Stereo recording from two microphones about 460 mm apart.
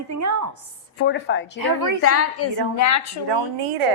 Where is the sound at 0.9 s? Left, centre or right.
Left.